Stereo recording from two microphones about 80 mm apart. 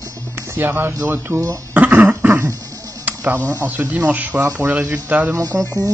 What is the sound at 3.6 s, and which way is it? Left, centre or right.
Speech, centre.